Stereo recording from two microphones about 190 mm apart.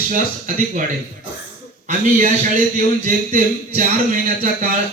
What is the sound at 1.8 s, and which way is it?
A man's voice, 40° right (ahead or behind).